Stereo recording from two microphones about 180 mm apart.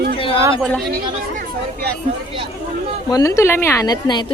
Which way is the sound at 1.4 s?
65° right (ahead or behind).